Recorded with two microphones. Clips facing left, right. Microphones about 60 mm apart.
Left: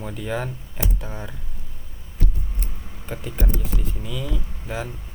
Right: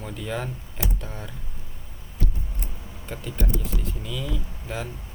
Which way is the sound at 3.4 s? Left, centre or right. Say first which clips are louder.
Left 1 dB; left.